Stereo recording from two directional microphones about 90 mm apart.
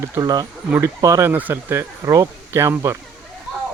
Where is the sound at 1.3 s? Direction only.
20° right (ahead or behind).